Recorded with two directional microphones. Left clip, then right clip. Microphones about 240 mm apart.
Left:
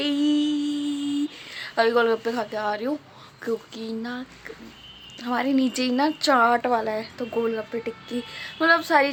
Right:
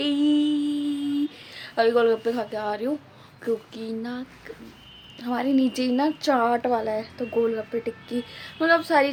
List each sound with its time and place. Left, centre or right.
0.0 s music: centre
1.5 s a woman's voice: centre